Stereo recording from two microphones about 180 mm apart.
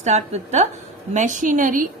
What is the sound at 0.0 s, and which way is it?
A woman's voice, 40° right (ahead or behind).